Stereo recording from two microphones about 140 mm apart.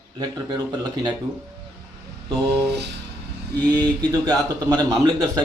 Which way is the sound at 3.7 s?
30° right (ahead or behind).